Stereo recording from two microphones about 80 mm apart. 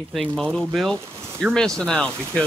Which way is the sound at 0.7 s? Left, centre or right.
Centre.